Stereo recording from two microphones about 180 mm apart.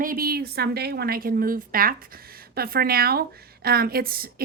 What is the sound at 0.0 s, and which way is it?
A woman's voice, 55° right (ahead or behind).